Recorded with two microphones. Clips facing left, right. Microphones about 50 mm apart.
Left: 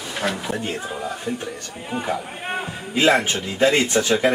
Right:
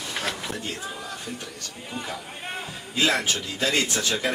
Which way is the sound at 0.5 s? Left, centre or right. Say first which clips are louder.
Left 6 dB; left.